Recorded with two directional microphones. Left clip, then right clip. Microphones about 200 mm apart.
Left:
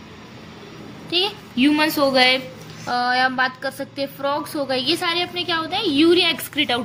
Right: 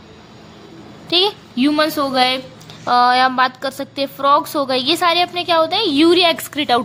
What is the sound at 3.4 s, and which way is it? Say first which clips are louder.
A woman's voice: right 5 dB; 60° right (ahead or behind).